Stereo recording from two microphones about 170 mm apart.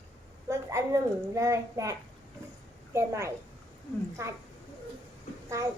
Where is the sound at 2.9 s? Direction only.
15° right (ahead or behind).